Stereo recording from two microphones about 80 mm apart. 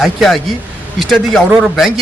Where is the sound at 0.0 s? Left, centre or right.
Centre.